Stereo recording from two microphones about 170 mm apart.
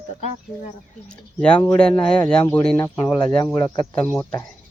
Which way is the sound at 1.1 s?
5° left (ahead or behind).